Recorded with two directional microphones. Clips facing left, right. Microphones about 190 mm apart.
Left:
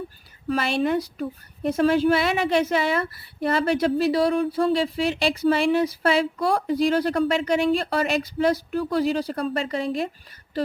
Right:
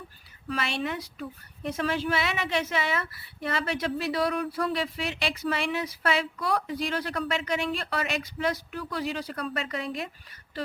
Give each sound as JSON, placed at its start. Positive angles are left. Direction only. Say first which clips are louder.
{"t": 0.4, "sound": "a woman's voice", "louder": "left 8 dB", "side_deg": 40}